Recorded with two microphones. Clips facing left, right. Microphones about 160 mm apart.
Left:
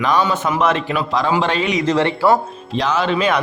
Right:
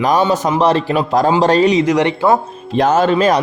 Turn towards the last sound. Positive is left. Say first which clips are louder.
# right 5 dB
turn(degrees=-40)  # may be behind; listen again after turning